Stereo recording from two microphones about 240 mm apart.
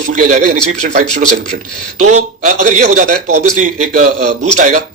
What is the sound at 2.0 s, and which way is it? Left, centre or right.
Speech, right.